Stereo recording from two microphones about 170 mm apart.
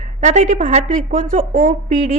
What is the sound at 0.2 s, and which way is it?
A woman's voice, 45° right (ahead or behind).